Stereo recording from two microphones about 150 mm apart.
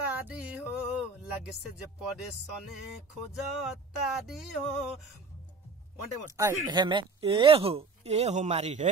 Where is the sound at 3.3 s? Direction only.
Centre (ahead or behind).